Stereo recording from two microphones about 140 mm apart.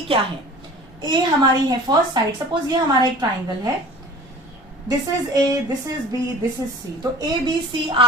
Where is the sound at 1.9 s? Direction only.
30° right (ahead or behind).